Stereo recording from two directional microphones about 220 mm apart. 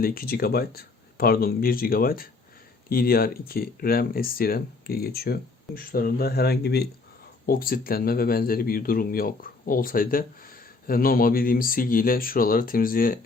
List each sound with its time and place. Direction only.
0.0 s speech: 40° left (ahead or behind)